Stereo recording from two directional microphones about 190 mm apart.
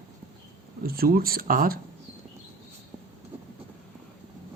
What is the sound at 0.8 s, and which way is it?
Speech, 50° right (ahead or behind).